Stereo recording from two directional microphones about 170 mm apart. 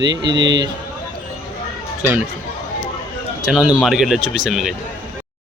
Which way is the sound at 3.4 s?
5° right (ahead or behind).